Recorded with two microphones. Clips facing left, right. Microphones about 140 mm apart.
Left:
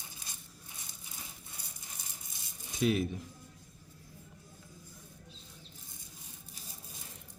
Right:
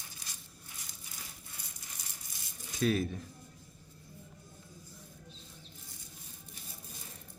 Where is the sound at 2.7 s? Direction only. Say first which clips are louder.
Left 1 dB; 20° left (ahead or behind).